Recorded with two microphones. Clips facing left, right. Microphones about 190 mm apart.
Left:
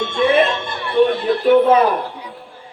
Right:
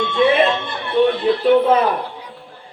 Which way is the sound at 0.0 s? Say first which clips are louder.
Even; 45° left (ahead or behind).